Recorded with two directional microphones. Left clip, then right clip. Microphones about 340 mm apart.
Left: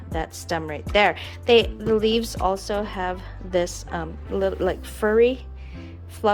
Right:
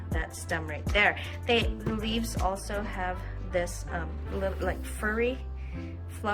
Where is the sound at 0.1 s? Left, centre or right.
Centre.